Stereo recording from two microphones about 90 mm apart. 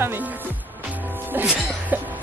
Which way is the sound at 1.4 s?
10° right (ahead or behind).